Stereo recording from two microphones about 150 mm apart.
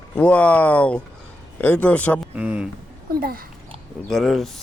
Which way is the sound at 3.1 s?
85° right.